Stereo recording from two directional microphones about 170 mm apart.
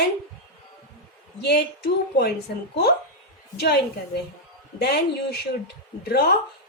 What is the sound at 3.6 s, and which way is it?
A woman's voice, 70° left (ahead or behind).